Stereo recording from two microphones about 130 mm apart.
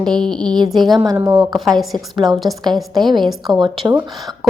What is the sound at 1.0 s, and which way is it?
Speech, 25° right (ahead or behind).